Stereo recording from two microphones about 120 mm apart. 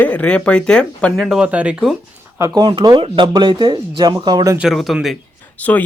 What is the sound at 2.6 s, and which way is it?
Speech, 40° right (ahead or behind).